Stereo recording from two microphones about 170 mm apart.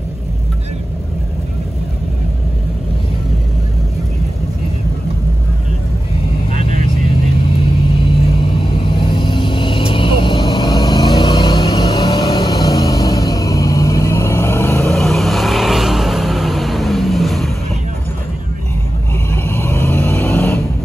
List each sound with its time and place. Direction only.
9.1 s vehicle: 30° left (ahead or behind)
14.9 s vehicle: centre (ahead or behind)
19.3 s vehicle: 15° left (ahead or behind)